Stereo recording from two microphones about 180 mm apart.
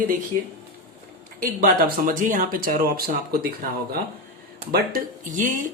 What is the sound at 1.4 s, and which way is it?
Speech, 50° right (ahead or behind).